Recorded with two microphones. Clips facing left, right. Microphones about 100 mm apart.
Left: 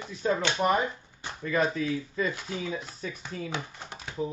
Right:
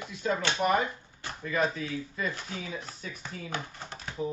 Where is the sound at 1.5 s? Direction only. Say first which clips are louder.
Left 3 dB; 40° left (ahead or behind).